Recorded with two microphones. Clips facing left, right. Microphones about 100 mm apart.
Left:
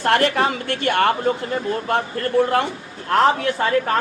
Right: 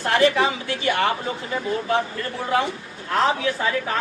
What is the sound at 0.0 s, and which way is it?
A woman's voice, 60° left (ahead or behind).